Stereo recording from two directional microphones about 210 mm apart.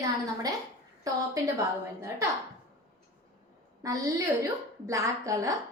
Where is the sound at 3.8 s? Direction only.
15° right (ahead or behind).